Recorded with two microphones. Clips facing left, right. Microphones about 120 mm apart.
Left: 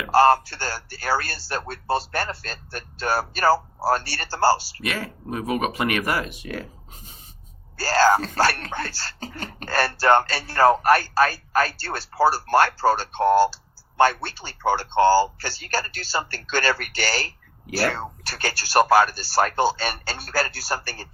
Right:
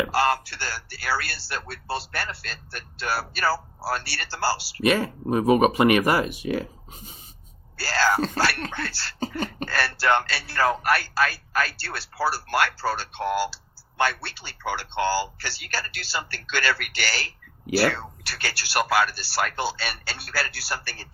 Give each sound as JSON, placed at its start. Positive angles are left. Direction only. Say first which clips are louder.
{"t": 0.1, "sound": "speech", "louder": "left 7 dB", "side_deg": 40}
{"t": 4.8, "sound": "speech", "louder": "right 8 dB", "side_deg": -25}
{"t": 6.2, "sound": "speech", "louder": "right 6 dB", "side_deg": -10}
{"t": 7.8, "sound": "speech", "louder": "left 5 dB", "side_deg": 45}
{"t": 9.2, "sound": "a sound", "louder": "right 8 dB", "side_deg": -20}
{"t": 9.6, "sound": "speech", "louder": "left 5 dB", "side_deg": 45}